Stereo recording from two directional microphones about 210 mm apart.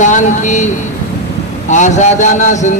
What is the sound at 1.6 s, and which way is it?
Speech, 35° left (ahead or behind).